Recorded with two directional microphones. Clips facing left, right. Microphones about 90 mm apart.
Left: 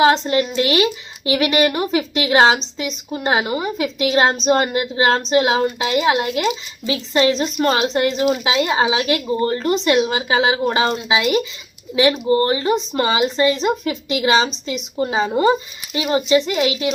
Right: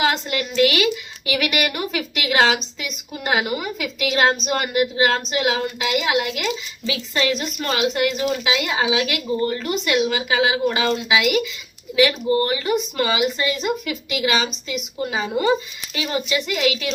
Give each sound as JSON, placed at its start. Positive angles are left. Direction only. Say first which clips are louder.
{"t": 0.0, "sound": "speech", "louder": "left 7 dB", "side_deg": 30}